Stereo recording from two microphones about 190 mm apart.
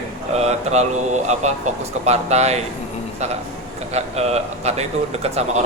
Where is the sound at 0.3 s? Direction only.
35° right (ahead or behind).